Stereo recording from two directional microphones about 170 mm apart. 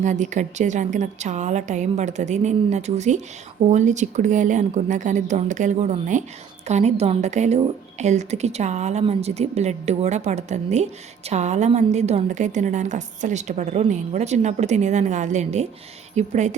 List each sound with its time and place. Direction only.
0.0 s a woman's voice: 45° right (ahead or behind)